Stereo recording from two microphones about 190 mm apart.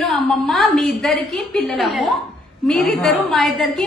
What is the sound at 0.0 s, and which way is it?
A woman's voice, centre (ahead or behind).